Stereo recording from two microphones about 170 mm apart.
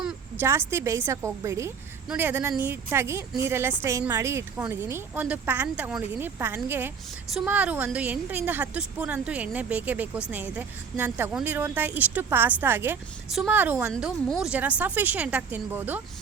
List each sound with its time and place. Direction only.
0.0 s a sound: 5° right (ahead or behind)
0.4 s a woman's voice: 15° right (ahead or behind)
13.9 s a woman's voice: centre (ahead or behind)